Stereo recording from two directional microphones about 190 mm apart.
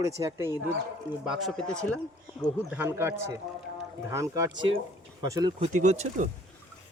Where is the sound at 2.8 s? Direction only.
15° right (ahead or behind).